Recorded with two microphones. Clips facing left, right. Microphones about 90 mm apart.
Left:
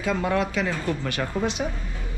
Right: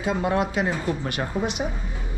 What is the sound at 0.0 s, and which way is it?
Speech, 25° right (ahead or behind).